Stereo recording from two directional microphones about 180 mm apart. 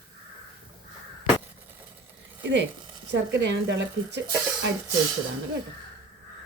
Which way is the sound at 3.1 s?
80° right.